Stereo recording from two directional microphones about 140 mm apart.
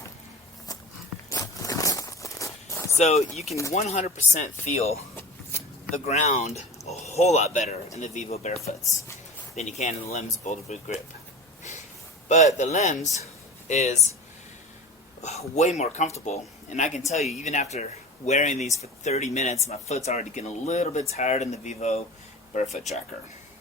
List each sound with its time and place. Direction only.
1.3 s walk: 25° left (ahead or behind)
3.0 s speech: 50° left (ahead or behind)
5.1 s vehicle: 15° left (ahead or behind)
6.1 s speech: 50° left (ahead or behind)
12.3 s speech: 55° left (ahead or behind)
15.2 s speech: 50° left (ahead or behind)